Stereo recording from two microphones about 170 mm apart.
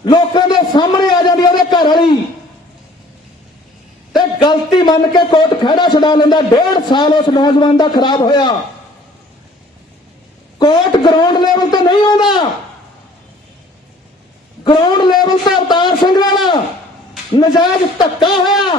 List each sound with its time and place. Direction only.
0.0 s a sound: 25° left (ahead or behind)
4.1 s a man's voice: 25° left (ahead or behind)
10.6 s a man's voice: 25° left (ahead or behind)
14.6 s a man's voice: 25° left (ahead or behind)